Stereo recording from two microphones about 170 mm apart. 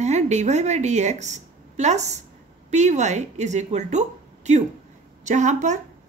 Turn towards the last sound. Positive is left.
turn(degrees=-45)  # may be behind; listen again after turning